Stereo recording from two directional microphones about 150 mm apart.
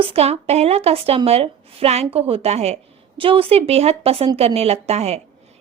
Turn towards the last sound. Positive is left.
turn(degrees=-45)  # may be behind; listen again after turning